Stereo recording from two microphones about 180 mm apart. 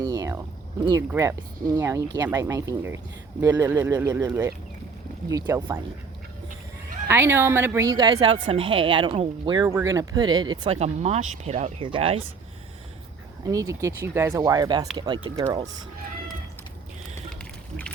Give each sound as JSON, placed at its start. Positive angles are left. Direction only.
{"t": 0.0, "sound": "a sound", "side_deg": -20}
{"t": 0.9, "sound": "speech", "side_deg": -15}
{"t": 5.5, "sound": "speech", "side_deg": -15}
{"t": 7.1, "sound": "speech", "side_deg": -15}
{"t": 10.8, "sound": "speech", "side_deg": -35}
{"t": 13.4, "sound": "speech", "side_deg": -20}